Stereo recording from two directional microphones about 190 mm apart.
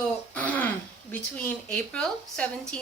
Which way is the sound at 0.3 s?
10° left (ahead or behind).